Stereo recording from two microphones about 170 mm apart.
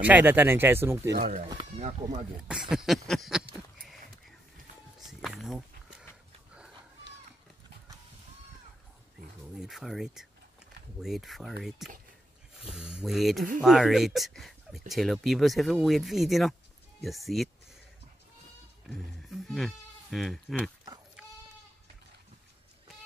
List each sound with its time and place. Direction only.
0.0 s speech: 10° right (ahead or behind)
2.0 s speech: 25° right (ahead or behind)
2.4 s a sound: 5° right (ahead or behind)
5.0 s walk: centre (ahead or behind)
9.6 s speech: centre (ahead or behind)
18.9 s speech: centre (ahead or behind)